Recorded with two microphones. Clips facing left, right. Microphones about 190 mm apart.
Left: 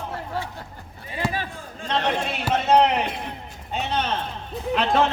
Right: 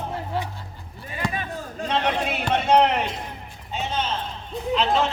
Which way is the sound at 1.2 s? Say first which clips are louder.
Left 1 dB; 5° left (ahead or behind).